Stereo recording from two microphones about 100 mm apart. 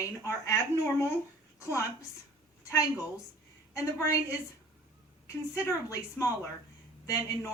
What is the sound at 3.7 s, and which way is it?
Speech, 30° left (ahead or behind).